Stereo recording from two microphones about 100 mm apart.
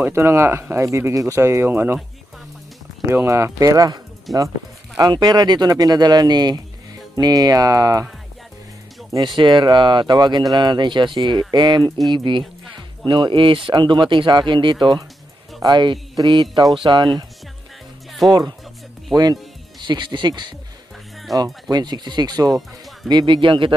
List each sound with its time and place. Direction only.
0.0 s speech: 25° right (ahead or behind)
3.1 s speech: 30° right (ahead or behind)
9.4 s speech: 50° right (ahead or behind)
19.1 s speech: 5° right (ahead or behind)
19.8 s speech: 50° right (ahead or behind)
21.6 s speech: 45° right (ahead or behind)